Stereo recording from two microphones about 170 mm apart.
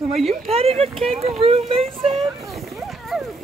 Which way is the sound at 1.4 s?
35° right (ahead or behind).